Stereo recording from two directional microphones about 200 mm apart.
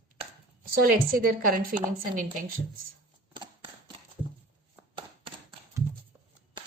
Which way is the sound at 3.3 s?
25° right (ahead or behind).